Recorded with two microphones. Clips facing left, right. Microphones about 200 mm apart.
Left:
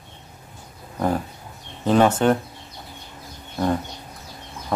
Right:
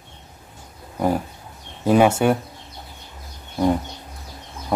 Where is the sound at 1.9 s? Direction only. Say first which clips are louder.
Right 1 dB; 10° right (ahead or behind).